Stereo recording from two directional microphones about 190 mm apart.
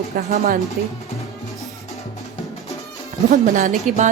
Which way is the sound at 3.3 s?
40° right (ahead or behind).